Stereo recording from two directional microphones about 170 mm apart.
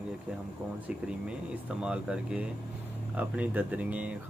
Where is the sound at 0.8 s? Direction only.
5° right (ahead or behind).